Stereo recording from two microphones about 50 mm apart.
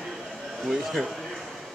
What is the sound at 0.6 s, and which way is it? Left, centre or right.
Speech, centre.